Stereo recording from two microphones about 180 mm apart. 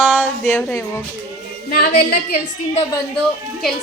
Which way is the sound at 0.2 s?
15° left (ahead or behind).